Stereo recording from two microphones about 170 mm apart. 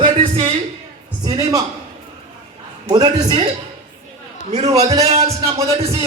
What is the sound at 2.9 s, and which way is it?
Speech, 25° right (ahead or behind).